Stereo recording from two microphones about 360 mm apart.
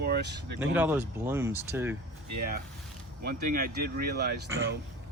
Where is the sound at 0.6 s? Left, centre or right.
Centre.